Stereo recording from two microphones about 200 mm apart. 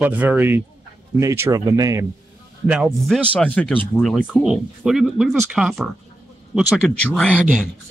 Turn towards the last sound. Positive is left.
turn(degrees=-5)  # may be behind; listen again after turning